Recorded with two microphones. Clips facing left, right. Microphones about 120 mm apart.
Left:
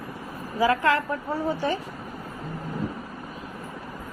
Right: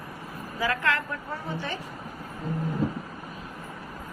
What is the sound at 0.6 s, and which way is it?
Speech, 25° left (ahead or behind).